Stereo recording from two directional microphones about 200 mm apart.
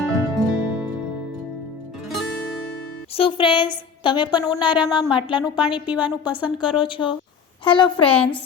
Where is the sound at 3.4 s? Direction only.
25° left (ahead or behind).